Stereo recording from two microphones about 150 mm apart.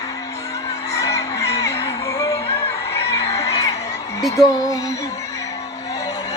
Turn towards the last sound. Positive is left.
turn(degrees=-5)  # may be behind; listen again after turning